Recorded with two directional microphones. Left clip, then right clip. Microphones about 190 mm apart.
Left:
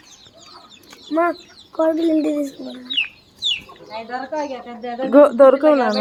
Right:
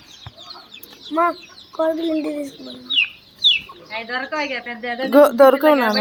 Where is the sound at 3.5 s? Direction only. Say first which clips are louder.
Right 6 dB; 10° left (ahead or behind).